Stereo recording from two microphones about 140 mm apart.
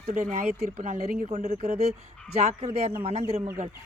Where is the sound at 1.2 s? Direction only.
55° right (ahead or behind).